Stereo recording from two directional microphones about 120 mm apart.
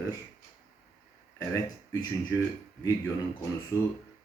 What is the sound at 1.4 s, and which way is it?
Speech, 25° left (ahead or behind).